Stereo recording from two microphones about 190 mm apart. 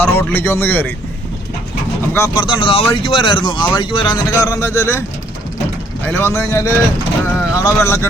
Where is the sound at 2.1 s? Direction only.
15° left (ahead or behind).